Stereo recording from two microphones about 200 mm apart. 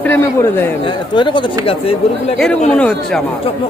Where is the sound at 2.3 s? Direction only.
Centre (ahead or behind).